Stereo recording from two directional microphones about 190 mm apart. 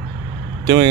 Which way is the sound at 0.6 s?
20° right (ahead or behind).